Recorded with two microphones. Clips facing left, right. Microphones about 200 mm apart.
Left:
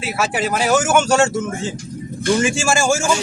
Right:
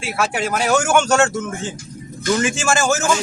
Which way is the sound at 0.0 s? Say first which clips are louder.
Left 1 dB; 5° left (ahead or behind).